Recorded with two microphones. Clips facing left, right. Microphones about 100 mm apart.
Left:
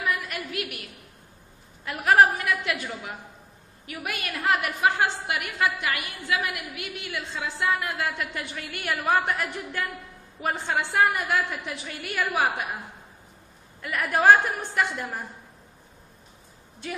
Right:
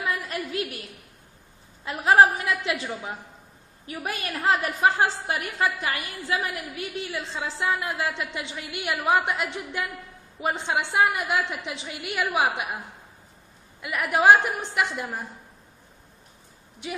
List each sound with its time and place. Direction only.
0.5 s a woman's voice: 30° right (ahead or behind)
1.9 s a woman's voice: 20° right (ahead or behind)
13.7 s a woman's voice: 10° right (ahead or behind)
16.8 s a woman's voice: 15° right (ahead or behind)